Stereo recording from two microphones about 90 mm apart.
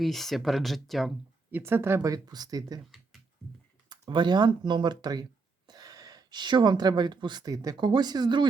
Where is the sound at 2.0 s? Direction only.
40° right (ahead or behind).